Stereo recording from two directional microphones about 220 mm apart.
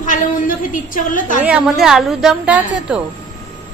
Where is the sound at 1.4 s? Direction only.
5° right (ahead or behind).